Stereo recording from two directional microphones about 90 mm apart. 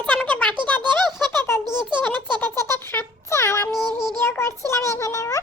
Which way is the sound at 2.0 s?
20° left (ahead or behind).